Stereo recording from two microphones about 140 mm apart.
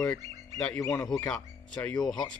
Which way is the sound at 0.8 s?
15° left (ahead or behind).